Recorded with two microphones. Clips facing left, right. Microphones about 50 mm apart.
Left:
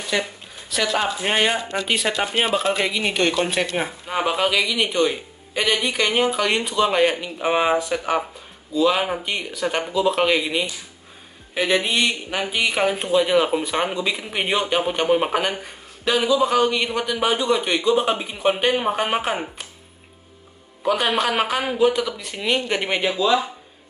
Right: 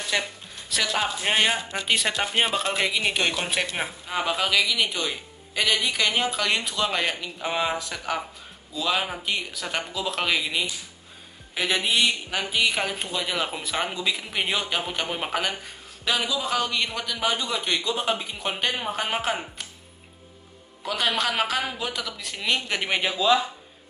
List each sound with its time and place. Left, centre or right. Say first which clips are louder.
0.1 s speech: left 4 dB; centre
4.1 s speech: left 4 dB; centre
7.4 s speech: left 7 dB; left
9.2 s speech: left 5 dB; centre
20.8 s speech: left 5 dB; centre